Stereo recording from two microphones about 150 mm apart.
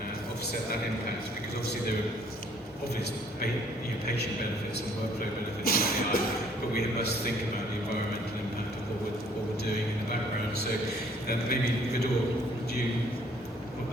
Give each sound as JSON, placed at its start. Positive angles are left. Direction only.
{"t": 5.6, "sound": "music", "side_deg": 85}
{"t": 6.7, "sound": "a man's voice", "side_deg": 90}
{"t": 11.3, "sound": "a man's voice", "side_deg": 90}